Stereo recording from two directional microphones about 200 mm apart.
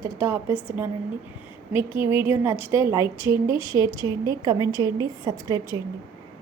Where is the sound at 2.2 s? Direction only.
10° right (ahead or behind).